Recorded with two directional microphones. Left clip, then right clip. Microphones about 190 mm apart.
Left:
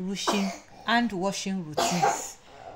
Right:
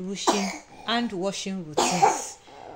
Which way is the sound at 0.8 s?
5° left (ahead or behind).